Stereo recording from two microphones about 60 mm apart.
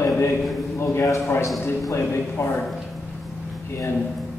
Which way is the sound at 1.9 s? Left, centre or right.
Left.